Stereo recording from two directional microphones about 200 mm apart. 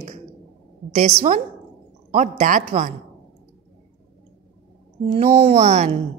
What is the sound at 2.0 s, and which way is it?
Speech, 40° right (ahead or behind).